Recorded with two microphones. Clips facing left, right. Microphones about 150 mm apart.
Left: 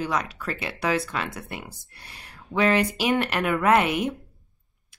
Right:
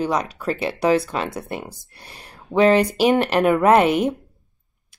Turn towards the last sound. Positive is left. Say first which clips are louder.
# right 6 dB
turn(degrees=-30)  # may be behind; listen again after turning